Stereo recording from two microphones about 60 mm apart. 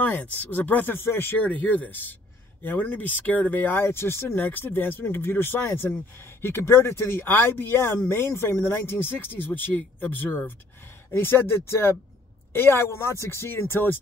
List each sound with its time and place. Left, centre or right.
0.0 s speech: left
1.0 s speech: left
1.4 s speech: left